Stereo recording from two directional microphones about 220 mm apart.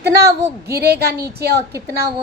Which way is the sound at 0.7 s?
45° right (ahead or behind).